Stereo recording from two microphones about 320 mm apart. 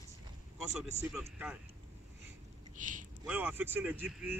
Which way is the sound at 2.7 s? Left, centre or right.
Right.